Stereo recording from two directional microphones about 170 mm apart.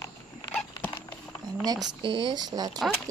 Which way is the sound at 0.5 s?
10° left (ahead or behind).